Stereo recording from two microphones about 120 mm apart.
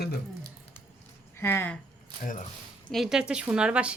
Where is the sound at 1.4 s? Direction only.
20° left (ahead or behind).